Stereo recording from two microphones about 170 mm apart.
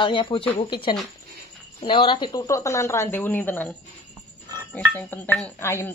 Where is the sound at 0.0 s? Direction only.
30° left (ahead or behind).